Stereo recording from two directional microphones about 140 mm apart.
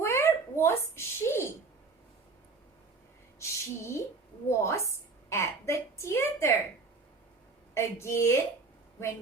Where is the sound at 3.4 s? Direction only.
20° left (ahead or behind).